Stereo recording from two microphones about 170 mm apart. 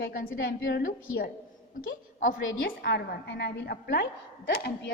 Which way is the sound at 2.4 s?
80° left.